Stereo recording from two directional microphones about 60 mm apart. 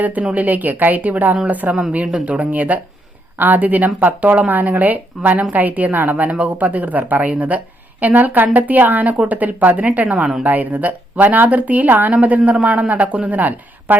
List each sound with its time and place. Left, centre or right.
0.0 s speech: right